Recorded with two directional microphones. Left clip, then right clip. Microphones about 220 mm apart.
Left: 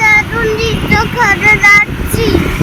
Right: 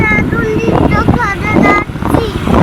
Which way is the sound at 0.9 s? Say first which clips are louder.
Left 2 dB; centre (ahead or behind).